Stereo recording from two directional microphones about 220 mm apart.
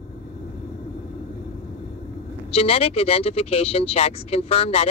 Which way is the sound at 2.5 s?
25° left (ahead or behind).